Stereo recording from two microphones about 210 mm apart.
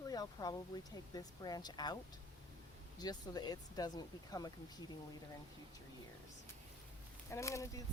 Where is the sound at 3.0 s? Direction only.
20° left (ahead or behind).